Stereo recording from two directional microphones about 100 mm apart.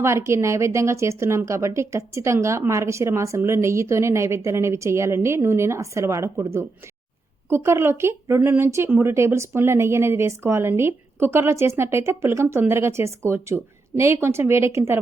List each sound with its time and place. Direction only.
0.0 s speech: 25° right (ahead or behind)